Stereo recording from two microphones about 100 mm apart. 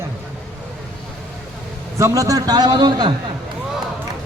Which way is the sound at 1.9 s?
30° right (ahead or behind).